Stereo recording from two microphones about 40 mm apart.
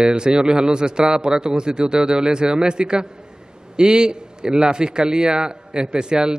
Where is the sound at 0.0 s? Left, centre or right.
Right.